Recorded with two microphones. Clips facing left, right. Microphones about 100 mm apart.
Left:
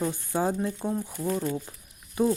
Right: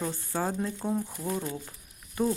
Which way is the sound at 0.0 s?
15° left (ahead or behind).